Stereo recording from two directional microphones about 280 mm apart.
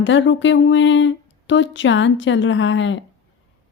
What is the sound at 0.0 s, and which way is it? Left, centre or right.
Speech, left.